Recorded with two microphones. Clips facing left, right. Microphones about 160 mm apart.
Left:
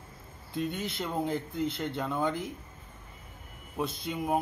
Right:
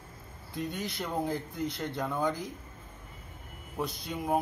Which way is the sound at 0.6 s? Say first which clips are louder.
Left 2 dB; 20° left (ahead or behind).